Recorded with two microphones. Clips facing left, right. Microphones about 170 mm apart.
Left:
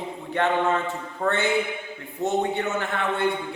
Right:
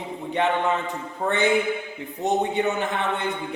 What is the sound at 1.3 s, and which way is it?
A man's voice, 15° right (ahead or behind).